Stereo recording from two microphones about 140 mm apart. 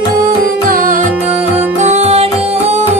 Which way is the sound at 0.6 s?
80° right.